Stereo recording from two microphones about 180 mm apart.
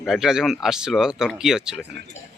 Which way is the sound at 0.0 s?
Centre (ahead or behind).